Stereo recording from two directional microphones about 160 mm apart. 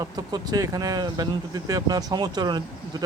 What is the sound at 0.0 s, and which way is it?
Speech, 25° right (ahead or behind).